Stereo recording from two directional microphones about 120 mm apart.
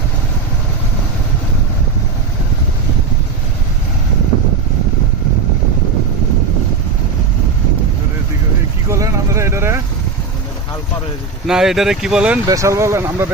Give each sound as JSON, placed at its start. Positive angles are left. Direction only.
{"t": 8.9, "sound": "vehicle", "side_deg": -25}
{"t": 11.4, "sound": "speech", "side_deg": -5}
{"t": 12.5, "sound": "speech", "side_deg": -25}